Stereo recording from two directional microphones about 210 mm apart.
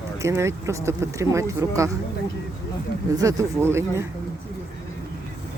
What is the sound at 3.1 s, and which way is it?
Speech, 15° right (ahead or behind).